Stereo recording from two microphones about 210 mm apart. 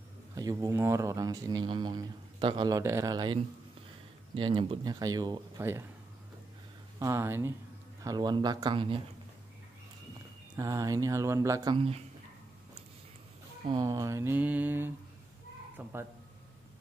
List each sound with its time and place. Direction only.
0.4 s speech: 15° right (ahead or behind)
7.0 s speech: 15° right (ahead or behind)
10.5 s speech: 15° right (ahead or behind)
13.7 s speech: 15° right (ahead or behind)